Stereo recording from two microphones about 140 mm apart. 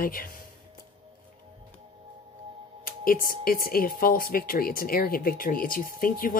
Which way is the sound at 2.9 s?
90° left.